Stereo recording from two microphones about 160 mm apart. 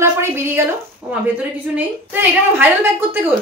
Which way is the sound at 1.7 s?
10° right (ahead or behind).